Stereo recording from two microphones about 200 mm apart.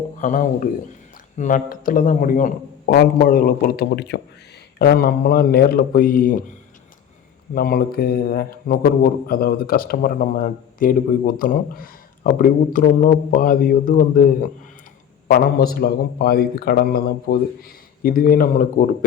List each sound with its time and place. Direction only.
0.2 s a man's voice: 40° left (ahead or behind)
7.5 s a man's voice: 50° left (ahead or behind)